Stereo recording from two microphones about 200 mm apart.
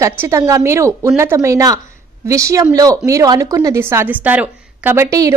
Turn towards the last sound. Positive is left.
turn(degrees=-15)  # may be behind; listen again after turning